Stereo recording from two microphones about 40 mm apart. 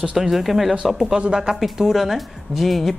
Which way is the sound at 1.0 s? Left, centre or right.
Centre.